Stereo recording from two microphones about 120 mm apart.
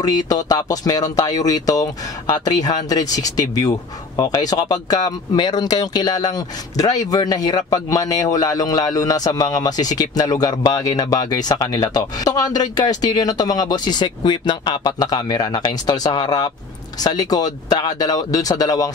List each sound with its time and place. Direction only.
0.0 s speech: 30° left (ahead or behind)